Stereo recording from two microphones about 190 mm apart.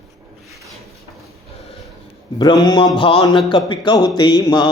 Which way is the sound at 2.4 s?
20° left (ahead or behind).